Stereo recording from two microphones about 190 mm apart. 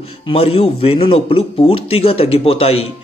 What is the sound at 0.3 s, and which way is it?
A man's voice, 30° left (ahead or behind).